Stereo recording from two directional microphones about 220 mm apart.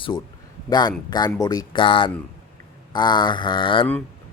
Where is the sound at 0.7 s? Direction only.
20° left (ahead or behind).